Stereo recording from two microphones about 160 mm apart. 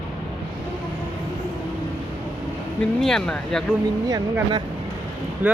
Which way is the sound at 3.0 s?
5° left (ahead or behind).